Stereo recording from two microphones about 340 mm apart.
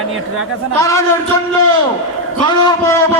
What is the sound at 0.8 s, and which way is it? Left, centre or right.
Speech, centre.